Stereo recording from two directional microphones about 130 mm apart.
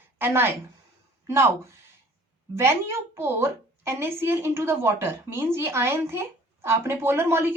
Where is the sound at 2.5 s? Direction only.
20° right (ahead or behind).